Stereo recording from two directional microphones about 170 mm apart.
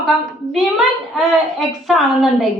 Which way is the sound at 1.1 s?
Centre (ahead or behind).